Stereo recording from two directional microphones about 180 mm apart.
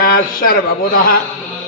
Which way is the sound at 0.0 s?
55° left (ahead or behind).